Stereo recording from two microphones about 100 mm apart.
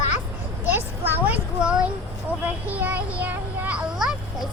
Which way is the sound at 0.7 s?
20° right (ahead or behind).